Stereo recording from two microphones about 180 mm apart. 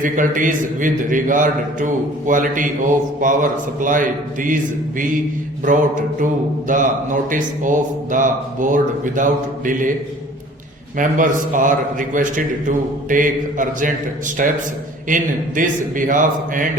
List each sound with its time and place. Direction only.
0.0 s a man's voice: 45° right (ahead or behind)
10.9 s a man's voice: 45° right (ahead or behind)